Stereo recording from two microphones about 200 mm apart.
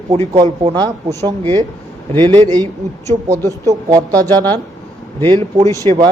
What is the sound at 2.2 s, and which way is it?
Speech, 20° right (ahead or behind).